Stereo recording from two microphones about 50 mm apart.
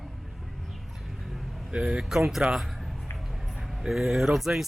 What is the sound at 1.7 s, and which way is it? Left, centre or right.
Speech, right.